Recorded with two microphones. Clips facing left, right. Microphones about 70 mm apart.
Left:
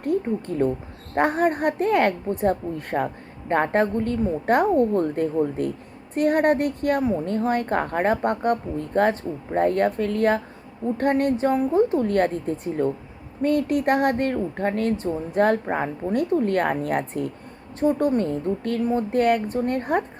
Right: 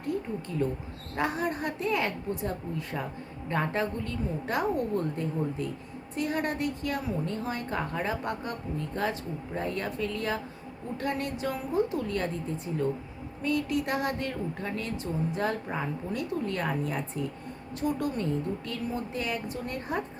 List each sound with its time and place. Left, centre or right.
0.0 s a woman's voice: left
17.7 s a woman's voice: left